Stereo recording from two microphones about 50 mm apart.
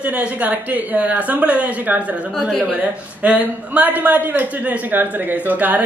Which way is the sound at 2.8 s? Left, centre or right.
Right.